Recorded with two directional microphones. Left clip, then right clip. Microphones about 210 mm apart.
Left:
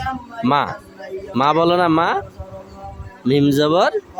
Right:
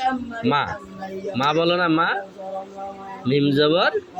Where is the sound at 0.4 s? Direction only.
35° left (ahead or behind).